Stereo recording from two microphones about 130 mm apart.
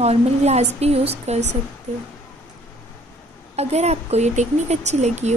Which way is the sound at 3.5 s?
55° right (ahead or behind).